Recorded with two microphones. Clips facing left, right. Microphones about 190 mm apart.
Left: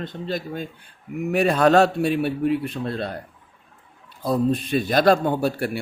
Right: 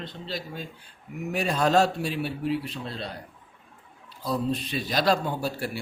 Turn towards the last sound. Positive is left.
turn(degrees=60)  # may be behind; listen again after turning